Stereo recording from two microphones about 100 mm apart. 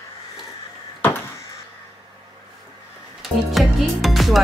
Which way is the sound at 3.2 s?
Centre (ahead or behind).